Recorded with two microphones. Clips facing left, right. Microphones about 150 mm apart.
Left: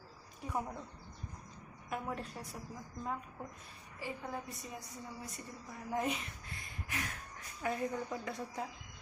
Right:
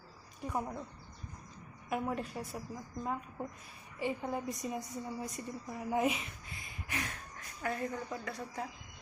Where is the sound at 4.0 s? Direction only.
15° right (ahead or behind).